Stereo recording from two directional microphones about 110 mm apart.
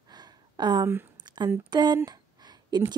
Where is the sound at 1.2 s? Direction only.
40° right (ahead or behind).